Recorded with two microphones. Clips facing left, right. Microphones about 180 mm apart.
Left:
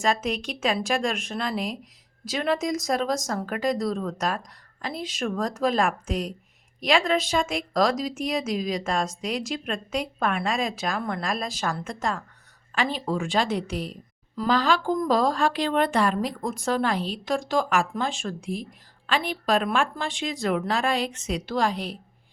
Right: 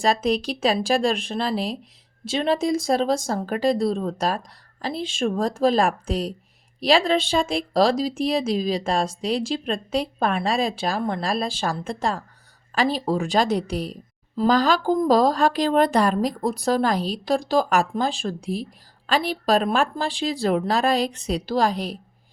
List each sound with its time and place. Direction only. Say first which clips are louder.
0.0 s speech: right 4 dB; 35° right (ahead or behind)